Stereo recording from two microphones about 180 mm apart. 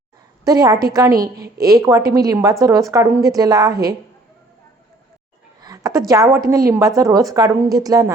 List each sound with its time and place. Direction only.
0.4 s speech: 20° right (ahead or behind)
5.6 s a sound: 20° right (ahead or behind)
6.1 s speech: 15° right (ahead or behind)